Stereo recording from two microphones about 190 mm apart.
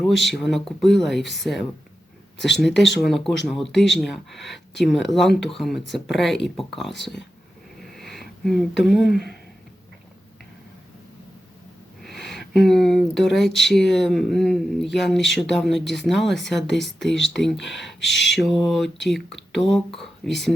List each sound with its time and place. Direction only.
0.0 s speech: centre (ahead or behind)
7.8 s a sound: centre (ahead or behind)
9.0 s speech: 60° left (ahead or behind)
12.0 s speech: centre (ahead or behind)
18.2 s speech: centre (ahead or behind)